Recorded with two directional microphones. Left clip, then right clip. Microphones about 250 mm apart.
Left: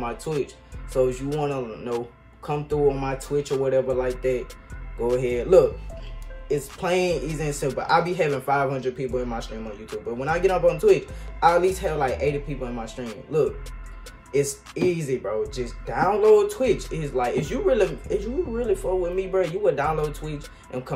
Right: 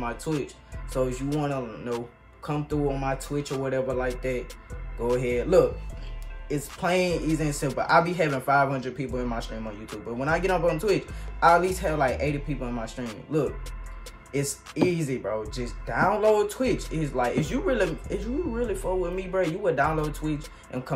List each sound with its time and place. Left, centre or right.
0.0 s speech: centre